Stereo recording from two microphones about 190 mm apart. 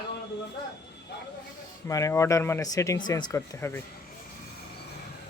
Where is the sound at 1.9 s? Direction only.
15° left (ahead or behind).